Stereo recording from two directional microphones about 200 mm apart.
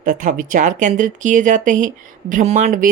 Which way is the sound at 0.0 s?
40° right (ahead or behind).